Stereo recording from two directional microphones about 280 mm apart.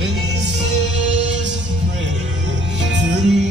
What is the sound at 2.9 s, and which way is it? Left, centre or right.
Music, right.